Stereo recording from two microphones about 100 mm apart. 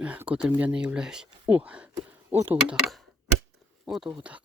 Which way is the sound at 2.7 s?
Centre (ahead or behind).